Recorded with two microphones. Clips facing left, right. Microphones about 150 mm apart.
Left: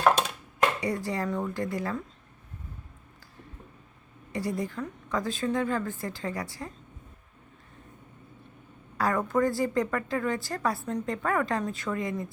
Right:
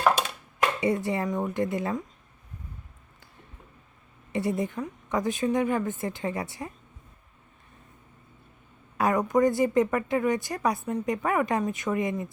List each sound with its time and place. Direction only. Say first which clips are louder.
0.8 s speech: right 4 dB; 25° right (ahead or behind)
4.3 s speech: right 3 dB; 25° right (ahead or behind)
9.0 s speech: right 3 dB; 20° right (ahead or behind)